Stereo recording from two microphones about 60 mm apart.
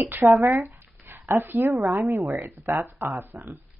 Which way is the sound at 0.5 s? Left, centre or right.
Right.